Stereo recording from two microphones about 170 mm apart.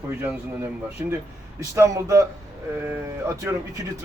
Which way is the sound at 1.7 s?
15° right (ahead or behind).